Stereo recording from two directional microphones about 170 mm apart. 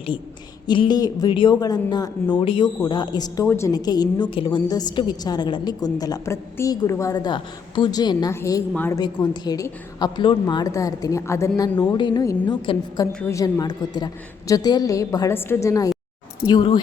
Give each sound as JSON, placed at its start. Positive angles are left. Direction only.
{"t": 0.7, "sound": "a woman's voice", "side_deg": 25}
{"t": 9.0, "sound": "a woman's voice", "side_deg": 25}